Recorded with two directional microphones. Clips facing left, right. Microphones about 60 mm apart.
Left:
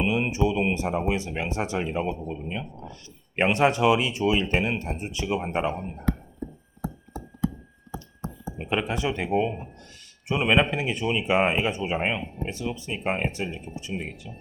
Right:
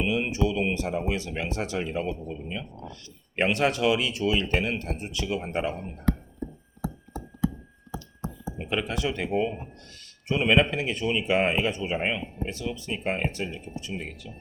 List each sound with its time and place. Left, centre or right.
0.0 s speech: left
8.5 s speech: centre